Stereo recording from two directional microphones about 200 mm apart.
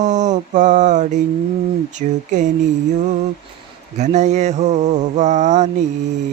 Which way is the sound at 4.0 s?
35° right (ahead or behind).